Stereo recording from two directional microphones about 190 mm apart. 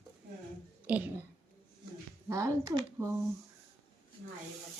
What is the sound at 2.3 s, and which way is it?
Speech, 15° right (ahead or behind).